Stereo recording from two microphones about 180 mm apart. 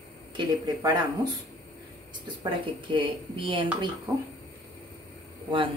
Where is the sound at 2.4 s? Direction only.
25° right (ahead or behind).